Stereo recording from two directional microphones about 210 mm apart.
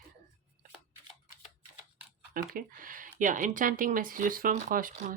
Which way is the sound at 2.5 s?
40° right (ahead or behind).